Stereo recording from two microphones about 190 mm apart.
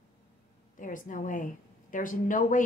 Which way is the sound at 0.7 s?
45° left (ahead or behind).